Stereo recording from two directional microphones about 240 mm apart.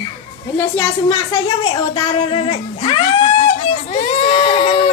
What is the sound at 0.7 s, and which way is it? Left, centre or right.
Speech, centre.